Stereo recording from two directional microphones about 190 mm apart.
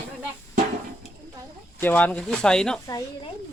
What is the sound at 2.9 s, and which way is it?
Speech, 20° left (ahead or behind).